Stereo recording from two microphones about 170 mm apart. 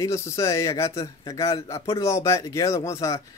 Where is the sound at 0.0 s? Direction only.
15° left (ahead or behind).